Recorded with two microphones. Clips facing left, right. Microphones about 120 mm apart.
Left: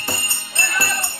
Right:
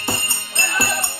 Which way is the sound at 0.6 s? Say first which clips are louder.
Right 1 dB; 25° right (ahead or behind).